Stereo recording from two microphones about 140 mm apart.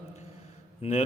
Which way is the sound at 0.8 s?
50° left (ahead or behind).